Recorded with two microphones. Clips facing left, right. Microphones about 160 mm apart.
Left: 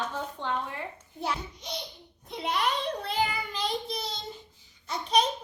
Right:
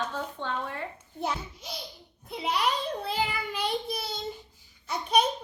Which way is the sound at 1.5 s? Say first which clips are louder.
Left 2 dB; 5° right (ahead or behind).